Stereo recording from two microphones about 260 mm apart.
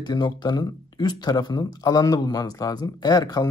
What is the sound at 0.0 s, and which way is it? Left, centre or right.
Speech, centre.